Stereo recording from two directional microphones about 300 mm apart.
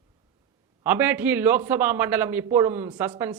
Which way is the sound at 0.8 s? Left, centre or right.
Centre.